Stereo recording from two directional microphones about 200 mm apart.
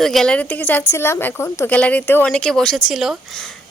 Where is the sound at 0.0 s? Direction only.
Centre (ahead or behind).